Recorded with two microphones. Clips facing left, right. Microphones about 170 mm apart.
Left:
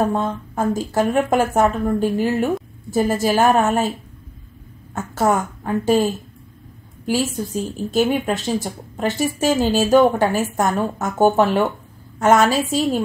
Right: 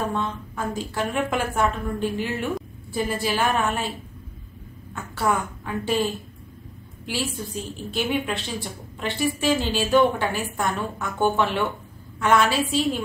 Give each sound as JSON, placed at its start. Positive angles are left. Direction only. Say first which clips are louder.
{"t": 0.0, "sound": "speech", "louder": "left 7 dB", "side_deg": 40}
{"t": 4.9, "sound": "speech", "louder": "left 6 dB", "side_deg": 45}